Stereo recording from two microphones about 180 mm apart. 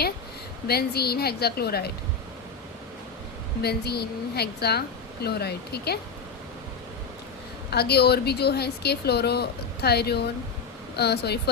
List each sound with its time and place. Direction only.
0.7 s a woman's voice: 60° left (ahead or behind)
3.6 s a woman's voice: 60° left (ahead or behind)
7.7 s a woman's voice: 65° left (ahead or behind)